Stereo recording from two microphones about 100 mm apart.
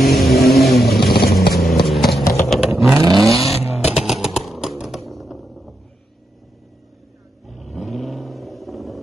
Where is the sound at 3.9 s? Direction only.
5° right (ahead or behind).